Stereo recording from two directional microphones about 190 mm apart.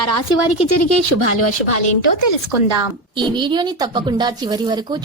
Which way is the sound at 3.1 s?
25° right (ahead or behind).